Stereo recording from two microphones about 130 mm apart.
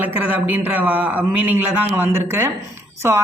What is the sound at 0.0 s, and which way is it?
Speech, 15° right (ahead or behind).